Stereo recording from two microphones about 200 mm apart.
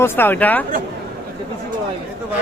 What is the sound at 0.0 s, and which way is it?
Speech, 10° left (ahead or behind).